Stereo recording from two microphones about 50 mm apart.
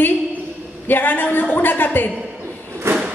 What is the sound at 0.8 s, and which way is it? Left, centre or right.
A woman's voice, left.